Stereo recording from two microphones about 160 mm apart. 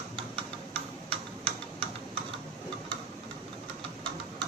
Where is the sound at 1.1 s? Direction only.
35° right (ahead or behind).